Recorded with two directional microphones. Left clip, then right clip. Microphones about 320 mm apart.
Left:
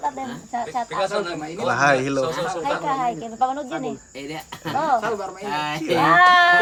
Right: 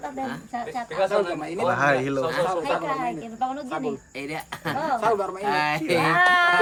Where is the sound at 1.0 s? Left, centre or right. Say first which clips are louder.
Right 3 dB; right.